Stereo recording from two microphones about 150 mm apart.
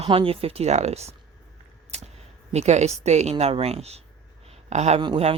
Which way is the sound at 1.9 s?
45° right (ahead or behind).